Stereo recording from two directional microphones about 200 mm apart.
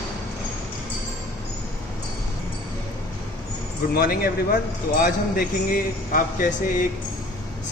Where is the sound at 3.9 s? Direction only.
50° left (ahead or behind).